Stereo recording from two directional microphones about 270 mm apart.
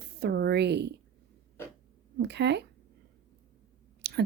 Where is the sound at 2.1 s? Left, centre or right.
Right.